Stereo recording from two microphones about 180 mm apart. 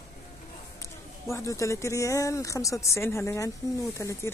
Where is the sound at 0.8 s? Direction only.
15° left (ahead or behind).